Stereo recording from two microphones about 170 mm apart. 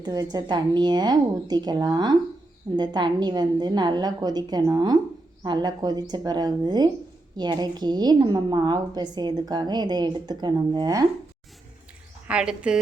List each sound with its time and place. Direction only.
0.0 s a woman's voice: 20° right (ahead or behind)
12.3 s a woman's voice: 5° right (ahead or behind)